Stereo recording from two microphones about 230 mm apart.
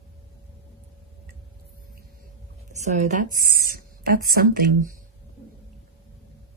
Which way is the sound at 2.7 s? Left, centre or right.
Right.